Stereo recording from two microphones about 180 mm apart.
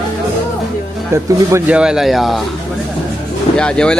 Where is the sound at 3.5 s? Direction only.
5° left (ahead or behind).